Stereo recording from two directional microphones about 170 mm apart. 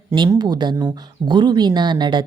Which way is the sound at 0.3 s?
25° right (ahead or behind).